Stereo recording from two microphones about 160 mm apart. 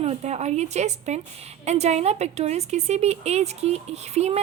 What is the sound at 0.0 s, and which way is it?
Speech, 40° right (ahead or behind).